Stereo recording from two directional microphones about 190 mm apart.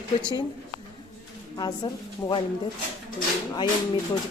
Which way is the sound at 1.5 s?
20° left (ahead or behind).